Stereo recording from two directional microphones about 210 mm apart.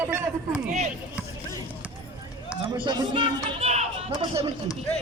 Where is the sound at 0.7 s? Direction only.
35° right (ahead or behind).